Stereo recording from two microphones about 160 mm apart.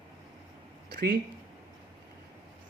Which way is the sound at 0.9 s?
75° right (ahead or behind).